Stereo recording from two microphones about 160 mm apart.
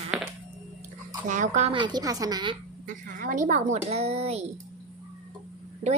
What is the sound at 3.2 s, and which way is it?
Speech, 55° right (ahead or behind).